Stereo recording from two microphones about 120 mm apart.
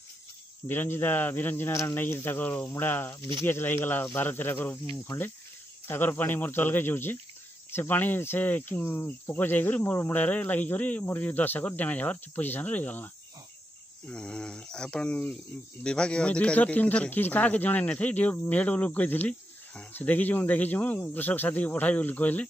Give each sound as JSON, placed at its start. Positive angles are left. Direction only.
{"t": 0.7, "sound": "speech", "side_deg": 20}
{"t": 3.2, "sound": "speech", "side_deg": -45}
{"t": 3.4, "sound": "speech", "side_deg": 20}